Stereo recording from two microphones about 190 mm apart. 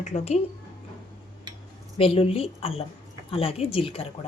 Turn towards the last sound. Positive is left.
turn(degrees=30)  # may be behind; listen again after turning